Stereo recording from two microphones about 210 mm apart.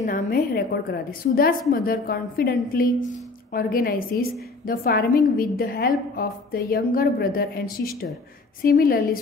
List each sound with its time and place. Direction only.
0.0 s a woman's voice: 45° left (ahead or behind)